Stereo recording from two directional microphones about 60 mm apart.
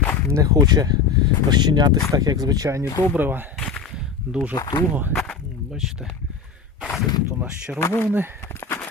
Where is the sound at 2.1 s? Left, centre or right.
Right.